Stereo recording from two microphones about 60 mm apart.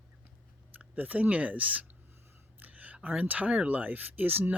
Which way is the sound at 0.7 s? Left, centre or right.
Right.